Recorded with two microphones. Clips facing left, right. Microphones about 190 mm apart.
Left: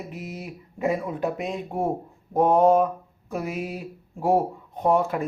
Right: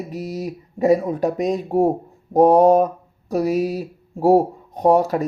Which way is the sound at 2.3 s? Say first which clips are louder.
Right 6 dB; 40° right (ahead or behind).